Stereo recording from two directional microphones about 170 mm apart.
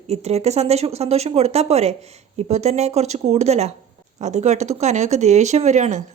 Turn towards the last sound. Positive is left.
turn(degrees=-45)  # may be behind; listen again after turning